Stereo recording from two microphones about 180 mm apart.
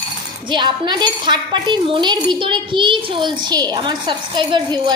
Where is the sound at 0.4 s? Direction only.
25° right (ahead or behind).